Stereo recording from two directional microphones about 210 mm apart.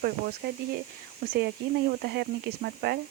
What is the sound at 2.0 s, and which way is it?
Speech, 50° right (ahead or behind).